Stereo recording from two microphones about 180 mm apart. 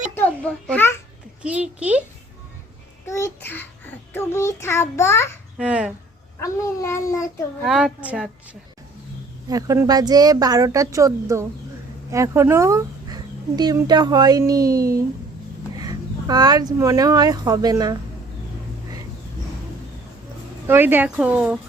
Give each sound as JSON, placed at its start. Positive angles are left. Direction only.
{"t": 0.1, "sound": "a sound", "side_deg": 10}
{"t": 1.4, "sound": "a woman's voice", "side_deg": -5}
{"t": 3.1, "sound": "a child's voice", "side_deg": 15}
{"t": 5.5, "sound": "a woman's voice", "side_deg": -5}
{"t": 6.4, "sound": "a child's voice", "side_deg": 15}
{"t": 7.6, "sound": "a woman's voice", "side_deg": 0}
{"t": 9.5, "sound": "speech", "side_deg": -20}
{"t": 20.7, "sound": "speech", "side_deg": -10}